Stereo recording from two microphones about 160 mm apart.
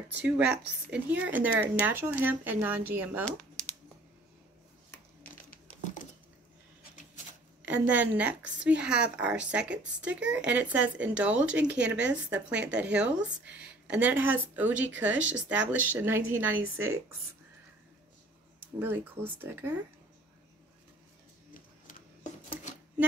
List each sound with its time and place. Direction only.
0.2 s a woman's voice: 10° right (ahead or behind)
5.5 s crumpling: 55° left (ahead or behind)
7.6 s a woman's voice: 10° right (ahead or behind)
18.8 s a woman's voice: 10° right (ahead or behind)